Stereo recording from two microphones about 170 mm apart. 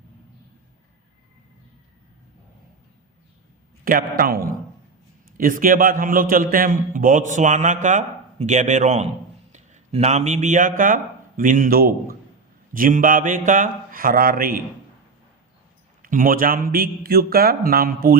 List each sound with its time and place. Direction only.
3.8 s a man's voice: 55° right (ahead or behind)
16.0 s a man's voice: 55° right (ahead or behind)